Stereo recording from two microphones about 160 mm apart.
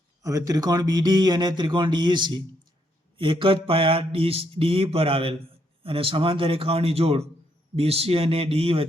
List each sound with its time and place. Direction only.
0.2 s speech: 20° right (ahead or behind)
3.2 s mantra: 30° right (ahead or behind)